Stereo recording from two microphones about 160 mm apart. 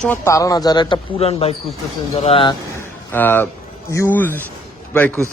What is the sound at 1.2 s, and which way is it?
Speech, 40° left (ahead or behind).